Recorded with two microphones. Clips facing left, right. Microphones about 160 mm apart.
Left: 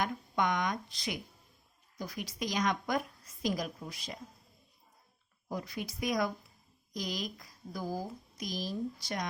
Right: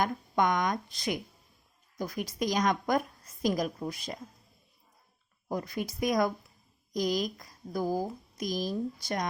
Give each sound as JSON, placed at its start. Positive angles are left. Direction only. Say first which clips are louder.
{"t": 0.0, "sound": "a woman's voice", "louder": "right 4 dB", "side_deg": -45}
{"t": 5.5, "sound": "a woman's voice", "louder": "right 5 dB", "side_deg": -50}